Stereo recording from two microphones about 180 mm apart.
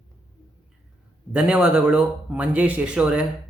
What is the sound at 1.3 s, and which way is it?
A man's voice, 5° right (ahead or behind).